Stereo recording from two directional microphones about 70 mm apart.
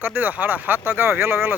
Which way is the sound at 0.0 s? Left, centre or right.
Right.